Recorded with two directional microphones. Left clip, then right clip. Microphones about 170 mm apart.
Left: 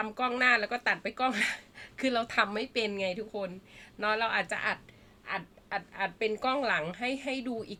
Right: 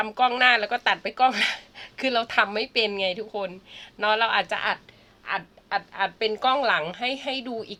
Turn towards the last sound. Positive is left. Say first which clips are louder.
# right 6 dB
turn(degrees=20)  # may be behind; listen again after turning